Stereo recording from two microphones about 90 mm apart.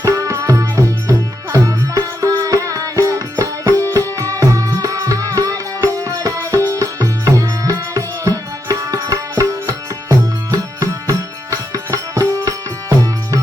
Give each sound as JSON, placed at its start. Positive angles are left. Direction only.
{"t": 0.0, "sound": "music", "side_deg": -35}